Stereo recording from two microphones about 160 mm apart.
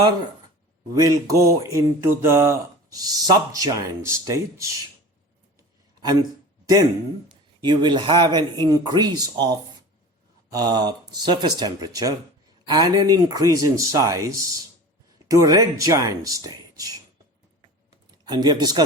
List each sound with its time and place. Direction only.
0.9 s speech: 20° right (ahead or behind)
7.6 s speech: 30° right (ahead or behind)
18.3 s speech: 25° right (ahead or behind)